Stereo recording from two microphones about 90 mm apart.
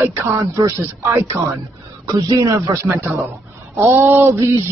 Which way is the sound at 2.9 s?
25° right (ahead or behind).